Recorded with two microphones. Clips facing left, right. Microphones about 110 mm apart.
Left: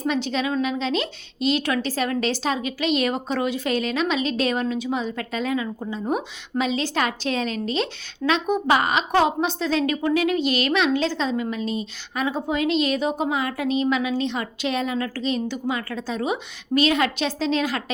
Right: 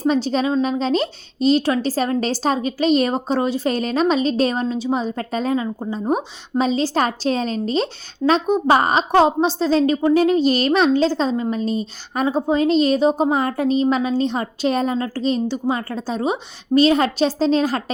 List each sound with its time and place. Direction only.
0.0 s a woman's voice: 35° right (ahead or behind)